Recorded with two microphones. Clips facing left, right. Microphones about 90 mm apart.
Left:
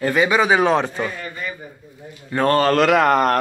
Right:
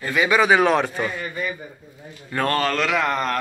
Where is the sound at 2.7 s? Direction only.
50° left (ahead or behind).